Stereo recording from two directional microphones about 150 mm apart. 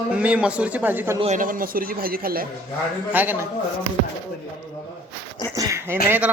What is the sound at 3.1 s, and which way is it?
Speech, 10° right (ahead or behind).